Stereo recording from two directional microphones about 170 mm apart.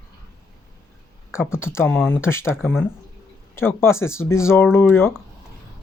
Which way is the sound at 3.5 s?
15° left (ahead or behind).